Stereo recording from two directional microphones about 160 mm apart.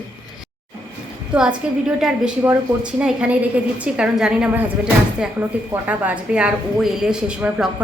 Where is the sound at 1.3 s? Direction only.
5° right (ahead or behind).